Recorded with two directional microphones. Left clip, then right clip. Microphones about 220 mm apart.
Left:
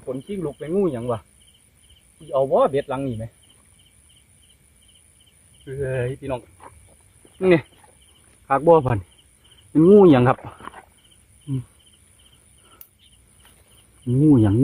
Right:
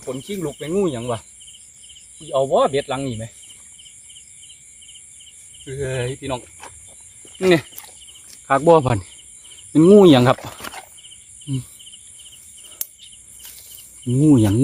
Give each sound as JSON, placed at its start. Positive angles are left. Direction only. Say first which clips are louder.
{"t": 0.0, "sound": "speech", "louder": "right 1 dB", "side_deg": -35}
{"t": 0.3, "sound": "speech", "louder": "right 2 dB", "side_deg": -20}
{"t": 2.3, "sound": "speech", "louder": "right 1 dB", "side_deg": -20}
{"t": 5.6, "sound": "speech", "louder": "right 1 dB", "side_deg": -15}
{"t": 7.4, "sound": "speech", "louder": "right 1 dB", "side_deg": -20}
{"t": 10.3, "sound": "a sound", "louder": "right 5 dB", "side_deg": -50}
{"t": 14.1, "sound": "speech", "louder": "right 1 dB", "side_deg": -5}